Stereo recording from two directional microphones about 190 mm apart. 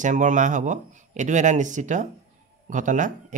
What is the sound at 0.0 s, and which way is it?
Speech, 40° right (ahead or behind).